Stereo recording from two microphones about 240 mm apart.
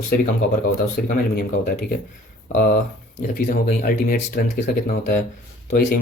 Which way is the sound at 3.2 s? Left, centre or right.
Left.